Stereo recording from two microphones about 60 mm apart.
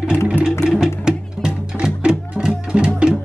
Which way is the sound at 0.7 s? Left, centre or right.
Centre.